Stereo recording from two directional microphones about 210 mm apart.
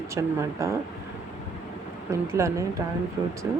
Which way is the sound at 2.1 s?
15° right (ahead or behind).